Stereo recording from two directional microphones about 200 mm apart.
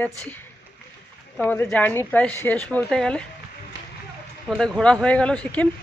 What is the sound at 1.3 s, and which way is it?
A woman's voice, 10° left (ahead or behind).